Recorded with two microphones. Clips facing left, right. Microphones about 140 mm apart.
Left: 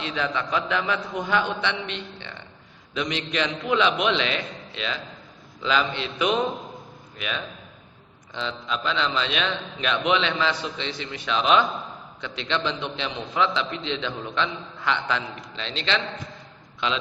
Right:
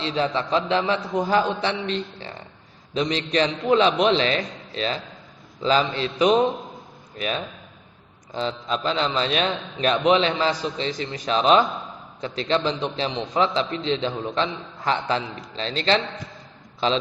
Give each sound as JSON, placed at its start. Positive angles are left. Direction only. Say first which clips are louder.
{"t": 0.0, "sound": "a man's voice", "louder": "right 4 dB", "side_deg": -35}
{"t": 8.3, "sound": "a man's voice", "louder": "right 4 dB", "side_deg": -40}